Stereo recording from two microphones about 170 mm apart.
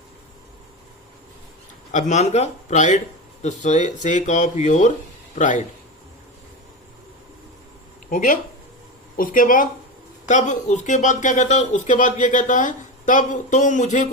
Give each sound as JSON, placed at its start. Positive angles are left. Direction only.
{"t": 1.9, "sound": "a man's voice", "side_deg": 45}
{"t": 8.1, "sound": "speech", "side_deg": 55}